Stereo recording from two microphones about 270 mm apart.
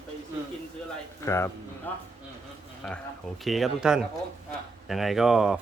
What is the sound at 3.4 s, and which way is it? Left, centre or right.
Speech, centre.